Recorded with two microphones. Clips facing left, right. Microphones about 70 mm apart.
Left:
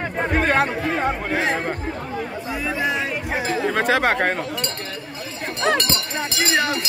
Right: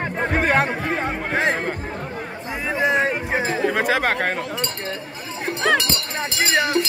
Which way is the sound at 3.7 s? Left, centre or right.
Centre.